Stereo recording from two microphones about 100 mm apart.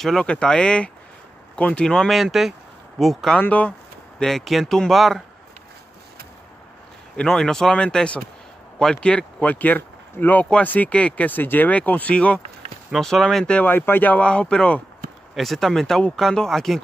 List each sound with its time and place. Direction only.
0.0 s speech: 5° left (ahead or behind)
3.3 s speech: 15° left (ahead or behind)
4.2 s speech: 5° left (ahead or behind)
7.2 s speech: 5° left (ahead or behind)